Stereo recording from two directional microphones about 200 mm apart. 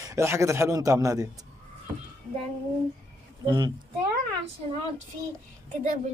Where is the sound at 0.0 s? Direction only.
15° right (ahead or behind).